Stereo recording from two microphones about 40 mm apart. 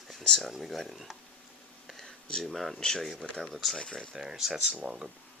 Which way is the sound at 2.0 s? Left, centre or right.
Centre.